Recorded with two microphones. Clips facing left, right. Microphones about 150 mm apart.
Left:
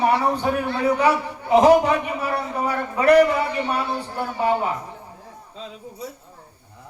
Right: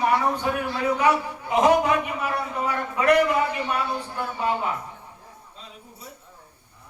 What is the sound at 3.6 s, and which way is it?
Speech, 35° left (ahead or behind).